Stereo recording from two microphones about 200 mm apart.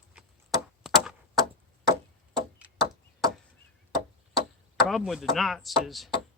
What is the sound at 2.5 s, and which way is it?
Chop, 5° right (ahead or behind).